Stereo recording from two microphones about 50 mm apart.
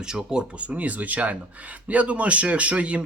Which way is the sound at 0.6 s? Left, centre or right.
Right.